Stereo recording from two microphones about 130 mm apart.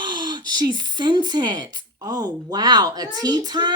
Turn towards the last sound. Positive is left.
turn(degrees=-35)  # may be behind; listen again after turning